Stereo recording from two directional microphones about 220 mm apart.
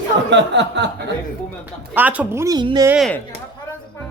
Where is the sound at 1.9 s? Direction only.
5° right (ahead or behind).